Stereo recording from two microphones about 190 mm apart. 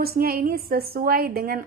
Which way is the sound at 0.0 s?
50° right (ahead or behind).